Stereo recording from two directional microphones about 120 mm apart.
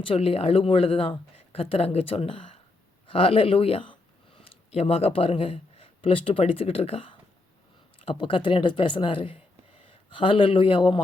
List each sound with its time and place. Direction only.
0.0 s speech: 55° left (ahead or behind)